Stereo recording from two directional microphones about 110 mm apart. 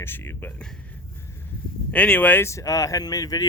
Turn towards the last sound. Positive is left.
turn(degrees=35)  # may be behind; listen again after turning